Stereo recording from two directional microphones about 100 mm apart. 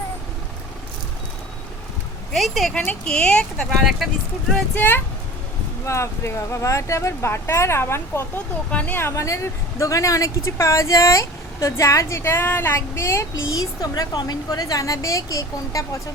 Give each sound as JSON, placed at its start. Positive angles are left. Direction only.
{"t": 2.3, "sound": "speech", "side_deg": 0}
{"t": 2.7, "sound": "speech", "side_deg": 15}
{"t": 4.7, "sound": "speech", "side_deg": 15}
{"t": 5.8, "sound": "a woman's voice", "side_deg": 30}